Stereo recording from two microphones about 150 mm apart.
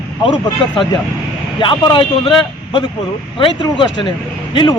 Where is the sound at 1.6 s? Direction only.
35° left (ahead or behind).